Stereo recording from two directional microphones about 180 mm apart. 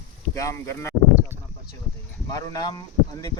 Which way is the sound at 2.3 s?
20° left (ahead or behind).